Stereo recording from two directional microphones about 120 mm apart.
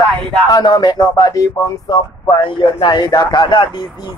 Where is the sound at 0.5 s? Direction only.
35° left (ahead or behind).